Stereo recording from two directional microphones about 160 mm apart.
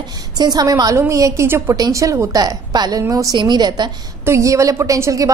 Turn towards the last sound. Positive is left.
turn(degrees=-20)  # may be behind; listen again after turning